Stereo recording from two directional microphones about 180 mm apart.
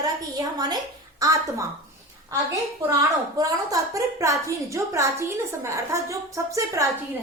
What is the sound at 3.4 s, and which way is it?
A woman's voice, 20° right (ahead or behind).